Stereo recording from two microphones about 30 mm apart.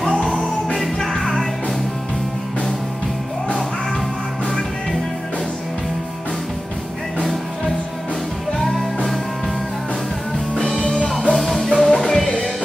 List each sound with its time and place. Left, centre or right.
1.2 s music: centre
8.6 s music: centre
10.6 s music: left
11.3 s music: centre